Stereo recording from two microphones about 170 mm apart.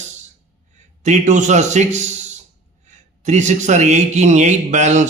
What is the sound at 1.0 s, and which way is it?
A man's voice, 45° right (ahead or behind).